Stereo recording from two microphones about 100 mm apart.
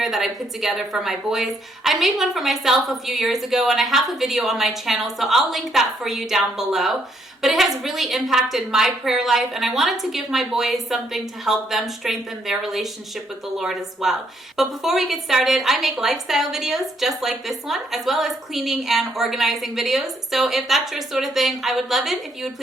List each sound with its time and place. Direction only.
0.0 s speech: centre (ahead or behind)